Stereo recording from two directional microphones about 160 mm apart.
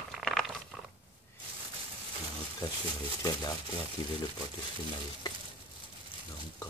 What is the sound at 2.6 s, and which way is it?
Speech, 25° left (ahead or behind).